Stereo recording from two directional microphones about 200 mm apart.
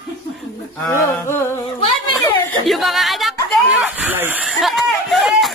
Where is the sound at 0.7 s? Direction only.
10° left (ahead or behind).